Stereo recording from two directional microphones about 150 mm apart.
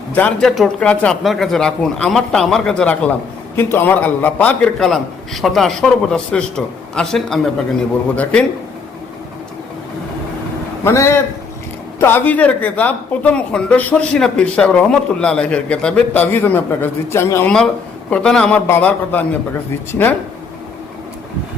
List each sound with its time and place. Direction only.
0.1 s speech: 10° left (ahead or behind)
10.8 s speech: 20° left (ahead or behind)
18.1 s speech: 5° left (ahead or behind)